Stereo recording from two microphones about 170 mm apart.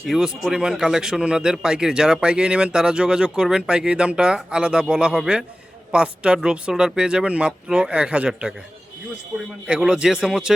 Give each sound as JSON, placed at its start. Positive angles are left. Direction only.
{"t": 0.1, "sound": "speech", "side_deg": 0}
{"t": 9.6, "sound": "speech", "side_deg": -5}